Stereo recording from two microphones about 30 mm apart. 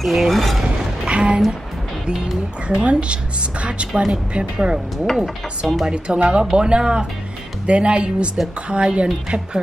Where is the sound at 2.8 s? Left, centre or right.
Right.